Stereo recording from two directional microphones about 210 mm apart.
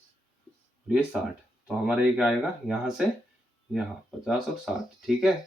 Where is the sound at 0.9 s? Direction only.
5° right (ahead or behind).